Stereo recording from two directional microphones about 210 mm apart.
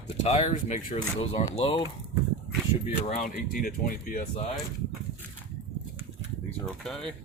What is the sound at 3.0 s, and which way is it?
Speech, 40° left (ahead or behind).